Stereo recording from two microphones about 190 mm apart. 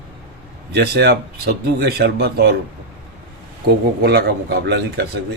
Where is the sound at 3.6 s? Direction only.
55° right (ahead or behind).